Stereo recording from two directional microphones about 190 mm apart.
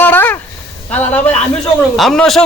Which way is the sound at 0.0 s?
10° left (ahead or behind).